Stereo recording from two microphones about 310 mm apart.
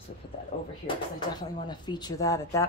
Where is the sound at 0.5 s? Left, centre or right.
Left.